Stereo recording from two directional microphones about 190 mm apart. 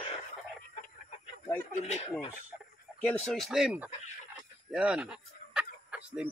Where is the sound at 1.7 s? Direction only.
35° left (ahead or behind).